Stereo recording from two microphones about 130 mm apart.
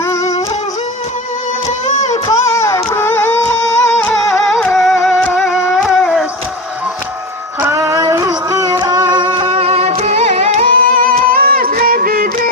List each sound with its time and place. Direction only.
0.0 s music: 25° left (ahead or behind)
2.2 s a sound: 25° left (ahead or behind)
4.1 s music: centre (ahead or behind)
7.6 s music: 20° right (ahead or behind); by 12.3 s 90° right